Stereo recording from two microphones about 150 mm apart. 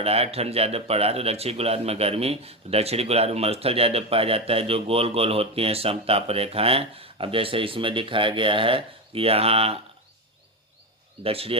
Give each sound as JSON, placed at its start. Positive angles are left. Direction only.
{"t": 0.0, "sound": "speech", "side_deg": -40}
{"t": 11.2, "sound": "speech", "side_deg": -40}